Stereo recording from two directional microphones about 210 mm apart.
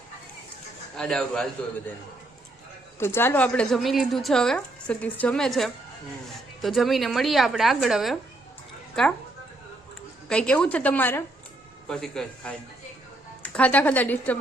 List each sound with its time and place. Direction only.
0.9 s speech: centre (ahead or behind)
3.0 s speech: 10° left (ahead or behind)
10.2 s speech: 5° left (ahead or behind)